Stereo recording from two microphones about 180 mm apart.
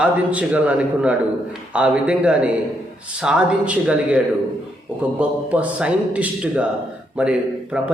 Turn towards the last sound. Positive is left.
turn(degrees=-5)  # may be behind; listen again after turning